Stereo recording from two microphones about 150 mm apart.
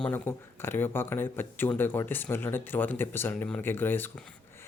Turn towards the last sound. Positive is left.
turn(degrees=15)  # may be behind; listen again after turning